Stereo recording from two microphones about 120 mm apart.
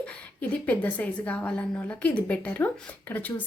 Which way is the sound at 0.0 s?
10° left (ahead or behind).